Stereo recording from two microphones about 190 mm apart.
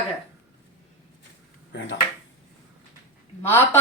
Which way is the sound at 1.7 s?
65° left (ahead or behind).